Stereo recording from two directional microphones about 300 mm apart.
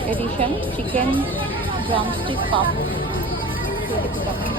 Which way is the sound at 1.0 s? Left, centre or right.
Centre.